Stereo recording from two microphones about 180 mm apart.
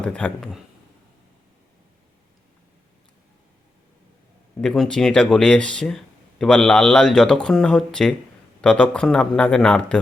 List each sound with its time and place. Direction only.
0.0 s speech: 5° left (ahead or behind)
4.6 s speech: 5° left (ahead or behind)